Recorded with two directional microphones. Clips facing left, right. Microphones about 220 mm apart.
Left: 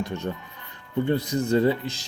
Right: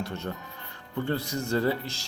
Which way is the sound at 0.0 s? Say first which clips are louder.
Left 4 dB; 15° left (ahead or behind).